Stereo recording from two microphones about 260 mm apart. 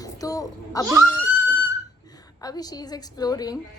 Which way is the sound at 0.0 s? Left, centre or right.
Centre.